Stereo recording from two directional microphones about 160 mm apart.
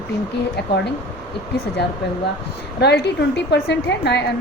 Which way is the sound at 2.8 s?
90° left.